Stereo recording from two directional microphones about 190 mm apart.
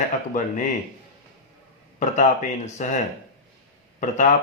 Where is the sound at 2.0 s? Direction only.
40° left (ahead or behind).